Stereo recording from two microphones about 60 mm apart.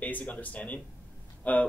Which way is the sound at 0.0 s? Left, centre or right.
Left.